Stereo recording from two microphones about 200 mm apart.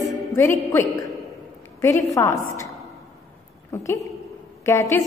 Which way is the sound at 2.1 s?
15° left (ahead or behind).